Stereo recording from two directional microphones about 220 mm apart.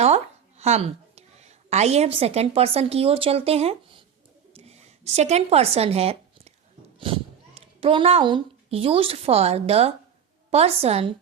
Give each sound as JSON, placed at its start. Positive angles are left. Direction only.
{"t": 0.0, "sound": "a woman's voice", "side_deg": -30}
{"t": 4.5, "sound": "a sound", "side_deg": -30}
{"t": 7.0, "sound": "a child's voice", "side_deg": -25}